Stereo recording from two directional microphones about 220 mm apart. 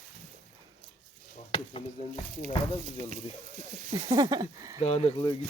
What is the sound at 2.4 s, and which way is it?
Speech, 30° right (ahead or behind).